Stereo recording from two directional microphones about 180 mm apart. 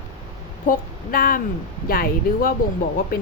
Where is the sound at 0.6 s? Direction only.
55° left (ahead or behind).